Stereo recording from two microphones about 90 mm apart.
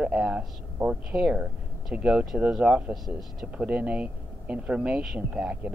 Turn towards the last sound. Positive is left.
turn(degrees=-15)  # may be behind; listen again after turning